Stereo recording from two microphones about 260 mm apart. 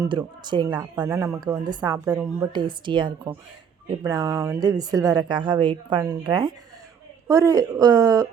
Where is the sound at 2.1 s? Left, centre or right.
Centre.